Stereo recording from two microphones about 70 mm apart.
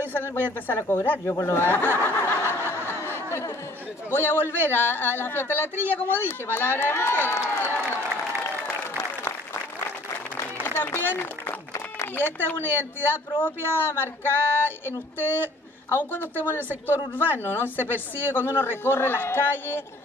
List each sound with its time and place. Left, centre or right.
0.0 s a man's voice: left
2.0 s snicker: left
4.1 s a man's voice: left
8.6 s applause: left
10.8 s a man's voice: left